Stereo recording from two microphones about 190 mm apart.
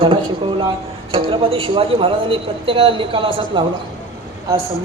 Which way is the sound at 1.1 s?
30° right (ahead or behind).